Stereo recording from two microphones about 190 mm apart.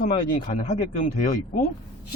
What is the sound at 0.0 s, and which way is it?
Speech, 45° left (ahead or behind).